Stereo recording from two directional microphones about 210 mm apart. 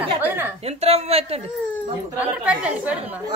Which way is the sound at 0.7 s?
30° right (ahead or behind).